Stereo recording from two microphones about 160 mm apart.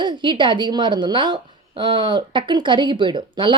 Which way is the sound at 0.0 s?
30° right (ahead or behind).